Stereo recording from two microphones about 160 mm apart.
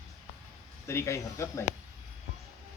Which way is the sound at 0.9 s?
20° left (ahead or behind).